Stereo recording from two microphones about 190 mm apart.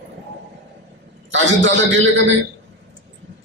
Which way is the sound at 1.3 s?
75° right (ahead or behind).